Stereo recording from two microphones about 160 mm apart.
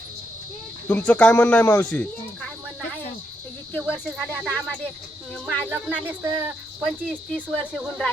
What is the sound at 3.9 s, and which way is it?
Speech, 10° left (ahead or behind).